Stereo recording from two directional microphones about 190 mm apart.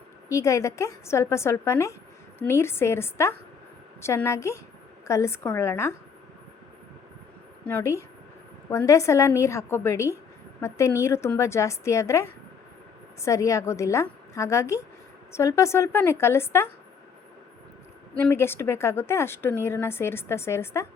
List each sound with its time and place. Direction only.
0.3 s speech: 15° left (ahead or behind)
7.7 s speech: 15° left (ahead or behind)
13.2 s speech: 15° left (ahead or behind)
18.2 s speech: 10° left (ahead or behind)